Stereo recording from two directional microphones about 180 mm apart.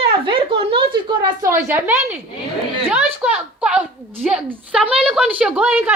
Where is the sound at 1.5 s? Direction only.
15° right (ahead or behind).